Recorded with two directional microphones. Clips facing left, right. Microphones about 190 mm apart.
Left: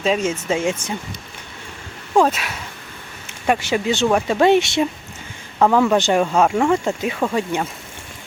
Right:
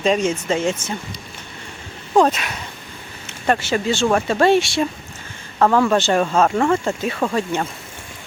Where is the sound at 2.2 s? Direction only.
5° left (ahead or behind).